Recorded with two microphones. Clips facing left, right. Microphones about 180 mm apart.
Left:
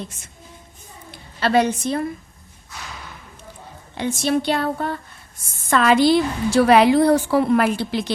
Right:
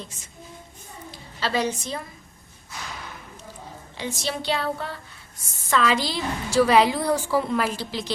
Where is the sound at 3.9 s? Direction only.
55° left (ahead or behind).